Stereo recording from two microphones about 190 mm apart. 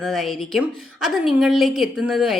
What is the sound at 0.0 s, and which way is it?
Speech, centre (ahead or behind).